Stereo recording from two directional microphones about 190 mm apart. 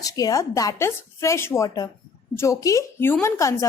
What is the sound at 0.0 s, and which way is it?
A woman's voice, 20° left (ahead or behind).